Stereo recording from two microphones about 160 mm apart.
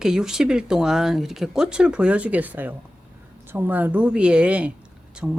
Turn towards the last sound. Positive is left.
turn(degrees=-5)  # may be behind; listen again after turning